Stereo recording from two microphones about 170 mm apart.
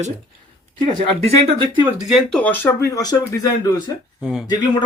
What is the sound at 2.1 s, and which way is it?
Speech, 5° left (ahead or behind).